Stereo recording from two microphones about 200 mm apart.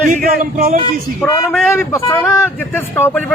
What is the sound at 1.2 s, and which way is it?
A man's voice, 10° left (ahead or behind).